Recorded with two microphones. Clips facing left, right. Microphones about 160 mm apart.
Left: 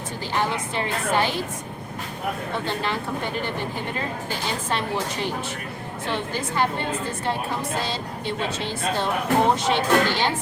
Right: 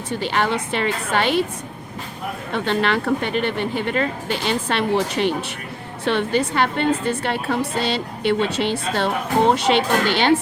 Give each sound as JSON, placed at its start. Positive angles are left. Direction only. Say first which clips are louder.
{"t": 0.2, "sound": "speech", "louder": "right 3 dB", "side_deg": -75}
{"t": 2.6, "sound": "speech", "louder": "right 11 dB", "side_deg": -75}